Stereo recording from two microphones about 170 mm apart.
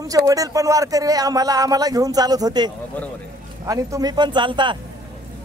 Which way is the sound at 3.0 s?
10° left (ahead or behind).